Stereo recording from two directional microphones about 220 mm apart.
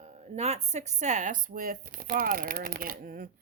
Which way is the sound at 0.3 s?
30° right (ahead or behind).